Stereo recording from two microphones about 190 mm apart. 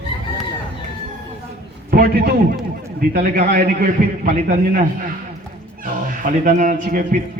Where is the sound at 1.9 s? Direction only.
50° right (ahead or behind).